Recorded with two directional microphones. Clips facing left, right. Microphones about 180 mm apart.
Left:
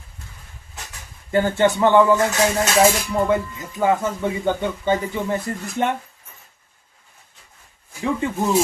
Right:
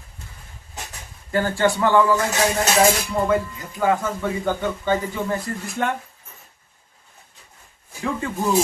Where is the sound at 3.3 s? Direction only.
20° left (ahead or behind).